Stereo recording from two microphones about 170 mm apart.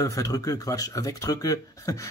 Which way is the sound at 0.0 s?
20° left (ahead or behind).